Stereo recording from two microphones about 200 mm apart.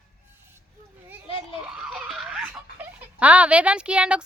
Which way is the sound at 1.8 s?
Centre (ahead or behind).